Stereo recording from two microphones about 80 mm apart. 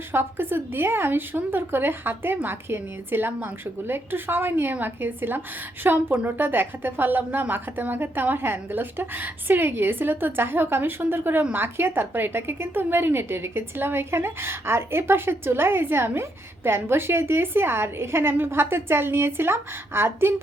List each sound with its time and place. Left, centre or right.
0.1 s a woman's voice: right